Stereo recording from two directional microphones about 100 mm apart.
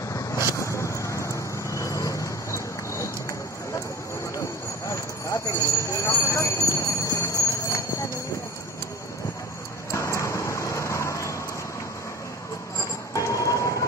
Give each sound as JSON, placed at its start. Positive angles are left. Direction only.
{"t": 0.1, "sound": "vehicle", "side_deg": 35}
{"t": 4.4, "sound": "clip-clop", "side_deg": 30}
{"t": 9.8, "sound": "vehicle", "side_deg": 30}
{"t": 13.1, "sound": "a sound", "side_deg": 30}